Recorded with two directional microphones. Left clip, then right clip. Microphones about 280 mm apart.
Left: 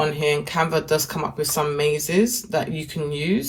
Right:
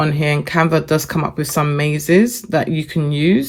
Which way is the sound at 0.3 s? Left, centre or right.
Right.